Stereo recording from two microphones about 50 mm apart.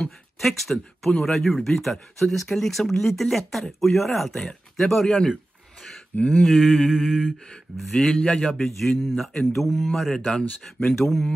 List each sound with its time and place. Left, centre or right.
0.4 s speech: centre
6.1 s a sound: left
6.4 s speech: centre
7.9 s speech: centre